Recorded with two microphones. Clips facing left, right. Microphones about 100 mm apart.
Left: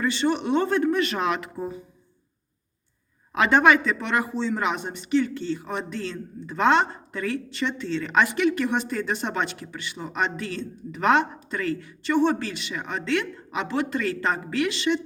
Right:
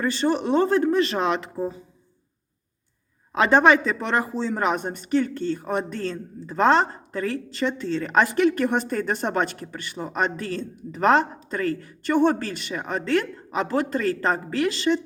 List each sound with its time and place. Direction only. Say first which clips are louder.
0.0 s speech: right 1 dB; 40° right (ahead or behind)
3.3 s speech: right 1 dB; 30° right (ahead or behind)